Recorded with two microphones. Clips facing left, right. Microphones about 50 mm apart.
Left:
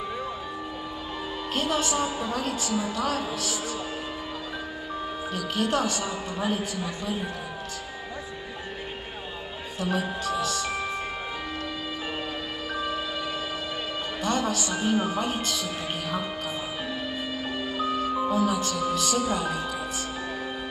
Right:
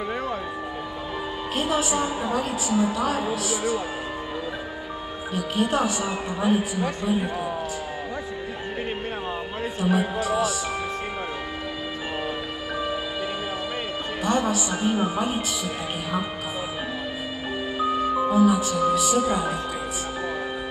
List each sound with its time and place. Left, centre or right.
1.5 s a woman's voice: centre
5.3 s a woman's voice: centre
9.8 s speech: centre
14.2 s a woman's voice: centre
17.7 s speech: centre